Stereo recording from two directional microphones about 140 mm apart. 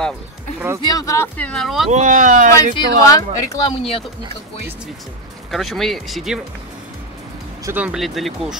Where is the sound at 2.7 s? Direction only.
25° left (ahead or behind).